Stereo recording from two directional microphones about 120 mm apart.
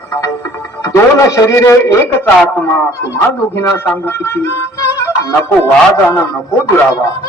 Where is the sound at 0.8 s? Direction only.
25° left (ahead or behind).